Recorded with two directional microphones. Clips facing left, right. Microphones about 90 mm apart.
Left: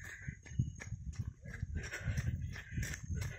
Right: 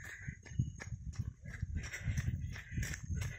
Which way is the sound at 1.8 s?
60° left (ahead or behind).